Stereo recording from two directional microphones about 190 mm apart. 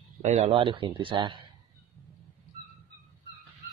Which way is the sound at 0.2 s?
30° right (ahead or behind).